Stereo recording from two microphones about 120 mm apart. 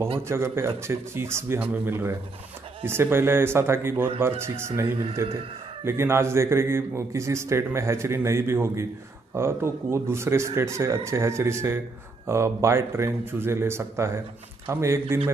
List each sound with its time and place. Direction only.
0.3 s a man's voice: 20° right (ahead or behind)